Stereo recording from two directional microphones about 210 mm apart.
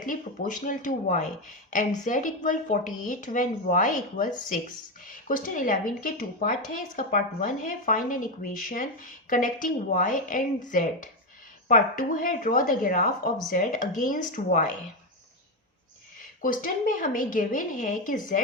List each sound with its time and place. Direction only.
0.0 s speech: 40° left (ahead or behind)
16.4 s speech: 40° left (ahead or behind)